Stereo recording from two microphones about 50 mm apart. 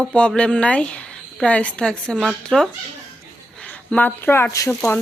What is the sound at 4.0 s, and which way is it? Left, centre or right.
Speech, left.